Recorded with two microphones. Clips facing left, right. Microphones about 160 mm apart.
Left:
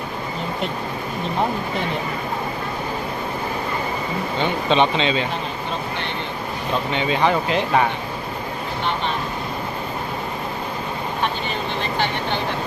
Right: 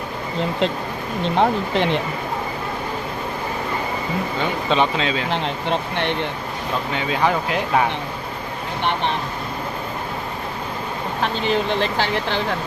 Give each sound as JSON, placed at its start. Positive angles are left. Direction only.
{"t": 1.4, "sound": "speech", "side_deg": -90}
{"t": 4.7, "sound": "speech", "side_deg": -5}
{"t": 5.3, "sound": "speech", "side_deg": -70}
{"t": 6.9, "sound": "speech", "side_deg": -5}
{"t": 11.4, "sound": "speech", "side_deg": -90}